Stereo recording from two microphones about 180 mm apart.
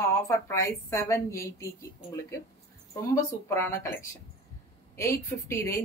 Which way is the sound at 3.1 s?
15° left (ahead or behind).